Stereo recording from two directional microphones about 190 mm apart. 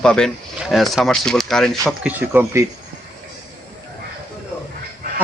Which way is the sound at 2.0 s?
10° right (ahead or behind).